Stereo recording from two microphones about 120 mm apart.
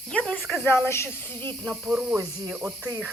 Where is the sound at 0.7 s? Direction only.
20° left (ahead or behind).